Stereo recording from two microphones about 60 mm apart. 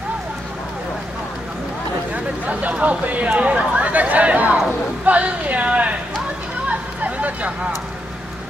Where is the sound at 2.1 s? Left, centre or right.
Right.